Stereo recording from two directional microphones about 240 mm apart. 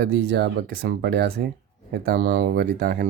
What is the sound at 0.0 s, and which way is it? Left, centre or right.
Speech, right.